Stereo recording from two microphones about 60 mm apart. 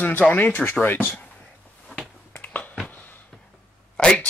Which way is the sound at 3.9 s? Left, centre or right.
Centre.